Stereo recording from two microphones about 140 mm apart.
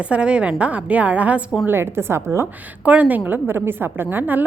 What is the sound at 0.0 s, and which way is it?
A woman's voice, 10° right (ahead or behind).